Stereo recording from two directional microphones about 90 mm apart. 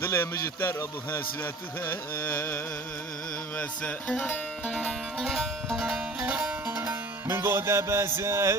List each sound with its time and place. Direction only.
0.0 s a man's voice: 25° left (ahead or behind)
3.6 s music: 10° left (ahead or behind); by 8.5 s 35° right (ahead or behind)